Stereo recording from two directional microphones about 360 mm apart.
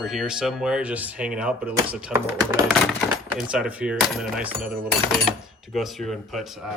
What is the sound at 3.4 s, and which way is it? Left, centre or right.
Speech, centre.